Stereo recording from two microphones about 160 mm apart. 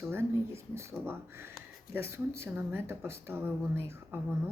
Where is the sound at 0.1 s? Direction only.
15° right (ahead or behind).